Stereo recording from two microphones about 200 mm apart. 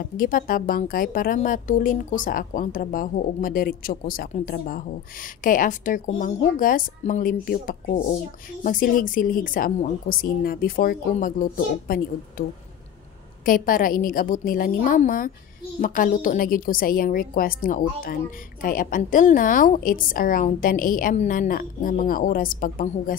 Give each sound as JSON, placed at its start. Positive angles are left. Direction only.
{"t": 0.2, "sound": "a woman's voice", "side_deg": 45}
{"t": 13.5, "sound": "a woman's voice", "side_deg": 45}